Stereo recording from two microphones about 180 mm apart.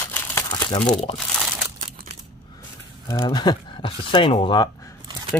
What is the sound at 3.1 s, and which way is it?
Speech, 20° left (ahead or behind).